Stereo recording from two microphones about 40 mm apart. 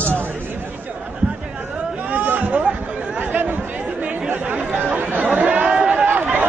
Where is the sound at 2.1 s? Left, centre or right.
Right.